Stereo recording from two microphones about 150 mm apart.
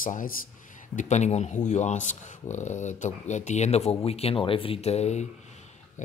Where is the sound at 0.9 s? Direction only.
50° left (ahead or behind).